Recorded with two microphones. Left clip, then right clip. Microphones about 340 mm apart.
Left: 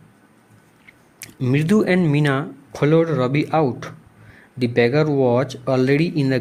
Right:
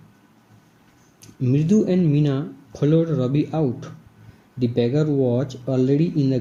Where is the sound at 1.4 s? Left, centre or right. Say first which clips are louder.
Left 2 dB; left.